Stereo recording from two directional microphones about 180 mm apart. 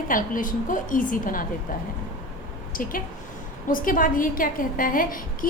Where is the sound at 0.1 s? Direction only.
50° left (ahead or behind).